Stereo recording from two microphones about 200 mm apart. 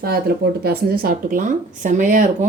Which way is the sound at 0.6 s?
50° right (ahead or behind).